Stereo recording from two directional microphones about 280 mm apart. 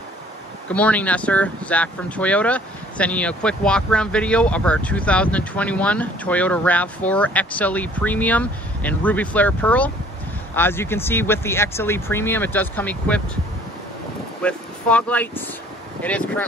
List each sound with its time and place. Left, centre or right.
0.7 s speech: centre
14.4 s speech: centre